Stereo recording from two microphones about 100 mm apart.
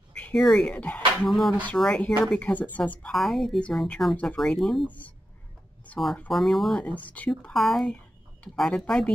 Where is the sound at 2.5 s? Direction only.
15° left (ahead or behind).